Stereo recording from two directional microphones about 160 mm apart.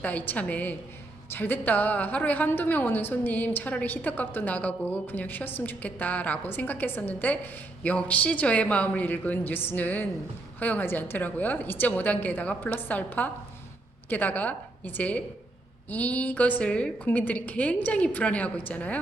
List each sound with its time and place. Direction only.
0.0 s a woman's voice: 10° left (ahead or behind)